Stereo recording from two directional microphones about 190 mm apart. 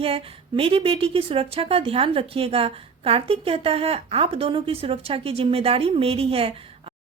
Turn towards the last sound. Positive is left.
turn(degrees=-30)  # may be behind; listen again after turning